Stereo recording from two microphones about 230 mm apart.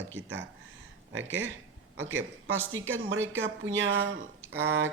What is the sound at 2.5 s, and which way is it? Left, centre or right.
Speech, right.